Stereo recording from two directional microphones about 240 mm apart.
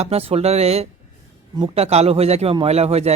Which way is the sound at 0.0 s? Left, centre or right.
Right.